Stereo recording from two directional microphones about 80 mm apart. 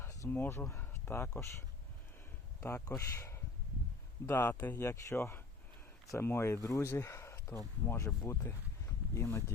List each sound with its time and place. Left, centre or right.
0.0 s a sound: left
0.3 s speech: left
0.7 s a sound: left
1.4 s speech: left
4.3 s speech: left
4.8 s speech: left
9.1 s speech: left